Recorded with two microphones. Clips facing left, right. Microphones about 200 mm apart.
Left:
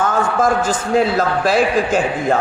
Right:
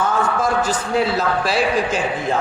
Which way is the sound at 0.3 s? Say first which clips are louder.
Left 3 dB; 50° left (ahead or behind).